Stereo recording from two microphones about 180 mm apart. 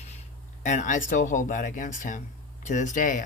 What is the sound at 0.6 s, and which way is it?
Speech, 40° left (ahead or behind).